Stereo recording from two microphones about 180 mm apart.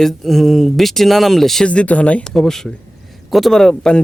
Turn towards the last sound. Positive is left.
turn(degrees=5)  # may be behind; listen again after turning